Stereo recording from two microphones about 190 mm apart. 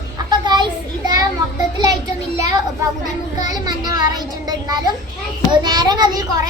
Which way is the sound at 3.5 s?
20° right (ahead or behind).